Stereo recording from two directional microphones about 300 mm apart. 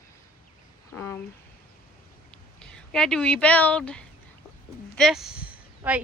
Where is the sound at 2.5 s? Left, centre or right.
Centre.